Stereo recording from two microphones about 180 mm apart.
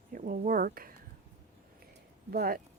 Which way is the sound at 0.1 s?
50° right (ahead or behind).